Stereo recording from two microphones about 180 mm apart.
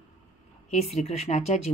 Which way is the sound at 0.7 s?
35° left (ahead or behind).